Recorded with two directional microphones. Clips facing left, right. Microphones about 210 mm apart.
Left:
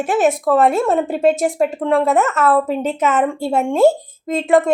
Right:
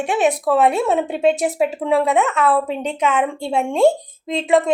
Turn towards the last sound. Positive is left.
turn(degrees=0)  # may be behind; listen again after turning